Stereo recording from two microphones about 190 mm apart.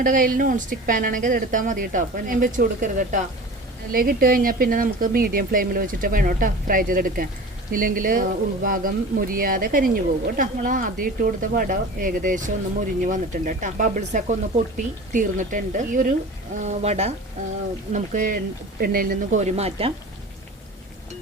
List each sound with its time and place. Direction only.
0.0 s speech: 50° right (ahead or behind)
19.4 s speech: 35° right (ahead or behind)